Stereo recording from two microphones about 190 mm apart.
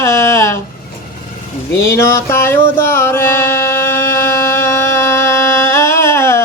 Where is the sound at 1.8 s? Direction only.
15° left (ahead or behind).